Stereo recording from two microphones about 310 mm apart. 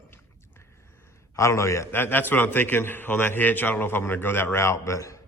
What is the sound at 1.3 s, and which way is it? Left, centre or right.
A man's voice, centre.